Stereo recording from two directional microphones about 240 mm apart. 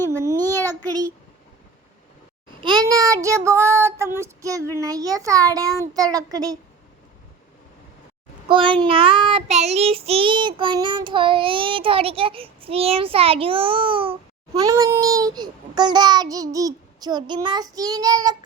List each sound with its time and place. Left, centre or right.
0.1 s child singing: centre
0.9 s a child's voice: centre
2.6 s child singing: centre
4.8 s a child's voice: centre
8.4 s child singing: right